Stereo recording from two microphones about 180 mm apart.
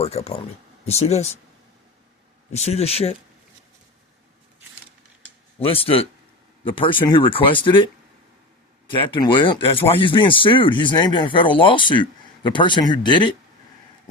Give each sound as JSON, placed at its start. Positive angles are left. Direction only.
{"t": 0.0, "sound": "speech", "side_deg": 35}
{"t": 2.5, "sound": "speech", "side_deg": 35}
{"t": 5.5, "sound": "speech", "side_deg": 30}
{"t": 8.9, "sound": "speech", "side_deg": 30}